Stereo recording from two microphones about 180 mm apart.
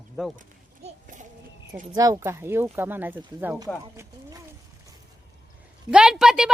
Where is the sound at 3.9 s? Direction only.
15° right (ahead or behind).